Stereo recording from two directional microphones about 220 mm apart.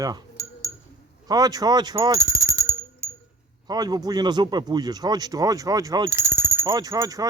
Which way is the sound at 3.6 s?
15° right (ahead or behind).